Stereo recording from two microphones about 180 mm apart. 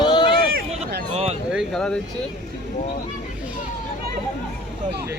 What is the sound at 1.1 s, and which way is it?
Speech, 35° right (ahead or behind).